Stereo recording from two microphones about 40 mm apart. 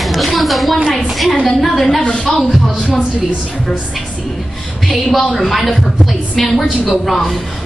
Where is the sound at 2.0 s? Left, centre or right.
Centre.